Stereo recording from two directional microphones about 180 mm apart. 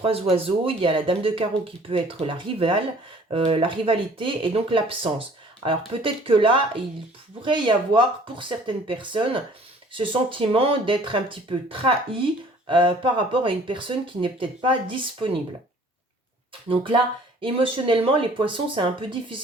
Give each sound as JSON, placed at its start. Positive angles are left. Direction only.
{"t": 0.0, "sound": "speech", "side_deg": -35}
{"t": 16.6, "sound": "speech", "side_deg": -30}